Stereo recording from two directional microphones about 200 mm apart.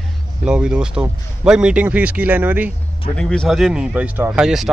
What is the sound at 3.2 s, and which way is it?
Speech, 5° left (ahead or behind).